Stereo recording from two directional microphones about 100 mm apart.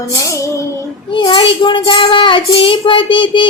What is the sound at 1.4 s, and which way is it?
A child's voice, 55° left (ahead or behind).